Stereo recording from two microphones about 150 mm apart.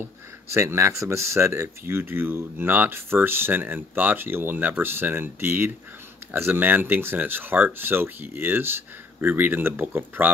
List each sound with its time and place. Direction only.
0.0 s speech: 15° right (ahead or behind)